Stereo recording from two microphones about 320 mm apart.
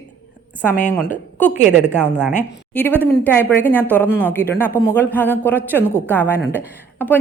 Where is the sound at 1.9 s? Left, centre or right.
Centre.